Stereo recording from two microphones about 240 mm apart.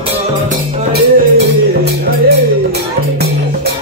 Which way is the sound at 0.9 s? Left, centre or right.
Right.